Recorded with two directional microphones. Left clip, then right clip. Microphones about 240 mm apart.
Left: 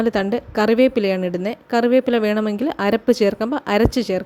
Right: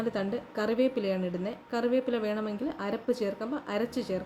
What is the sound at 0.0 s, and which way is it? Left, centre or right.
A woman's voice, left.